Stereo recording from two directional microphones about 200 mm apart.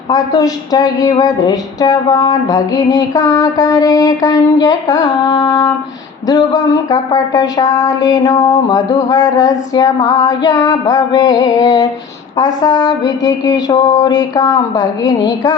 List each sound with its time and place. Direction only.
0.1 s a woman's voice: 20° left (ahead or behind)